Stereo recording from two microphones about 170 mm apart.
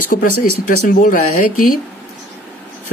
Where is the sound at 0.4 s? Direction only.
55° left (ahead or behind).